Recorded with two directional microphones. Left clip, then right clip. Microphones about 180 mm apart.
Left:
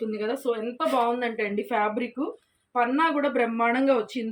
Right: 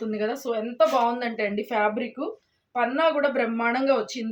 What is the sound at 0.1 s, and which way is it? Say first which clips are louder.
Speech: right 3 dB; 40° right (ahead or behind).